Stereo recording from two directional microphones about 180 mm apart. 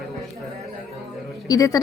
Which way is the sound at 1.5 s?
20° left (ahead or behind).